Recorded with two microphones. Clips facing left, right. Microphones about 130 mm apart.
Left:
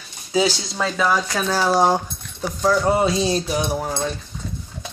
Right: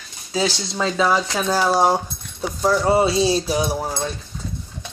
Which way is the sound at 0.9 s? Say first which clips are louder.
Right 1 dB; 10° right (ahead or behind).